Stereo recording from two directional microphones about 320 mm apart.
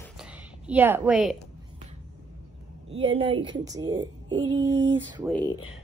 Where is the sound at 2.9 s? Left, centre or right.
Centre.